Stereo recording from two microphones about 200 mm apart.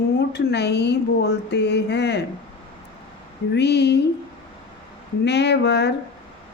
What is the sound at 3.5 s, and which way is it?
Speech, 55° left (ahead or behind).